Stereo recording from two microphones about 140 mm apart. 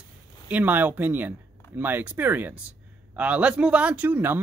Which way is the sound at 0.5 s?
10° right (ahead or behind).